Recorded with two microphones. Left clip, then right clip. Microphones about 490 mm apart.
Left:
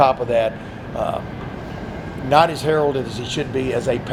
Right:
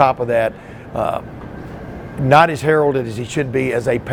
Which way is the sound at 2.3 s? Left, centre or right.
Right.